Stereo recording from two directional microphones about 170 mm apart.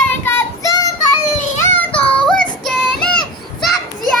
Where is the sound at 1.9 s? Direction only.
5° left (ahead or behind).